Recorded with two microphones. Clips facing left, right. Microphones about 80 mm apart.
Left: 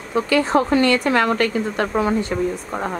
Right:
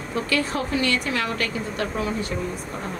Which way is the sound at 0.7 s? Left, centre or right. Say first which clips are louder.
Left 5 dB; left.